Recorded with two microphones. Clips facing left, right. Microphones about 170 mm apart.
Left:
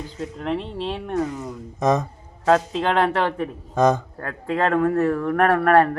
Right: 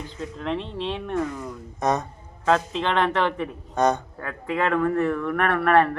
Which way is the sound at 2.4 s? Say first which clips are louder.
Left 3 dB; 40° left (ahead or behind).